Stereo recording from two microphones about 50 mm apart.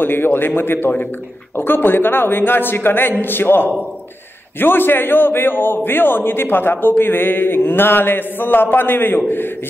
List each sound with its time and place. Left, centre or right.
0.0 s a man's voice: left